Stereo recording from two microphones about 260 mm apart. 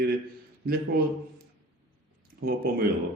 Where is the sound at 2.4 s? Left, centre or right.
Right.